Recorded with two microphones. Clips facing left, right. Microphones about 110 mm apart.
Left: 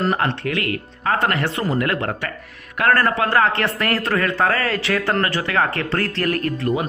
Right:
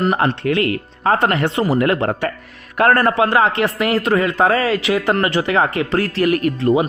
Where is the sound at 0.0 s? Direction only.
15° right (ahead or behind).